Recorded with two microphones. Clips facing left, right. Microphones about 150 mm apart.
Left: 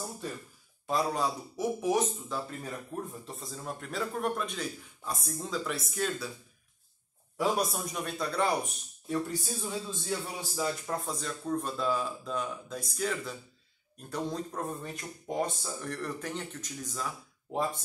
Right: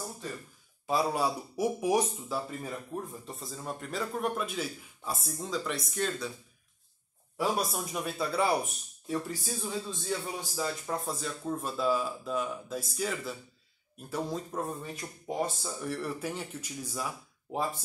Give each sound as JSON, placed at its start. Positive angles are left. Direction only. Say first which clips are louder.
{"t": 0.8, "sound": "a man's voice", "louder": "right 1 dB", "side_deg": -5}
{"t": 7.3, "sound": "a man's voice", "louder": "left 1 dB", "side_deg": 0}